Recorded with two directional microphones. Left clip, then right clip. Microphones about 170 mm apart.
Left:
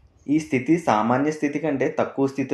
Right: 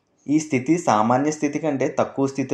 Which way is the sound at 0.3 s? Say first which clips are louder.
Right 1 dB; 40° right (ahead or behind).